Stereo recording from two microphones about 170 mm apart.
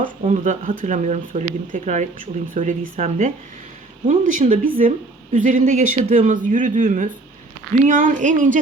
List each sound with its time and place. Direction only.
0.0 s speech: 50° right (ahead or behind)